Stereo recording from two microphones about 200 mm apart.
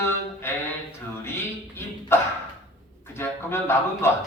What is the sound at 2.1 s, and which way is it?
A man's voice, 10° left (ahead or behind).